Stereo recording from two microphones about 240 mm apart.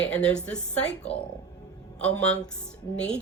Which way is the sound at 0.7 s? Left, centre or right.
Left.